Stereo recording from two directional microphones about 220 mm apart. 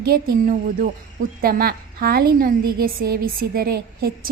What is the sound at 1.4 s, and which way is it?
A woman's voice, 45° right (ahead or behind).